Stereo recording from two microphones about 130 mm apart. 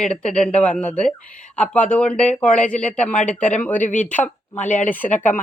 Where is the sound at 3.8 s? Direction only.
75° left (ahead or behind).